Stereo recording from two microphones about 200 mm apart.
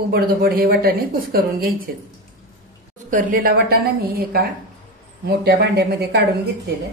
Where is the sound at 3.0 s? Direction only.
40° right (ahead or behind).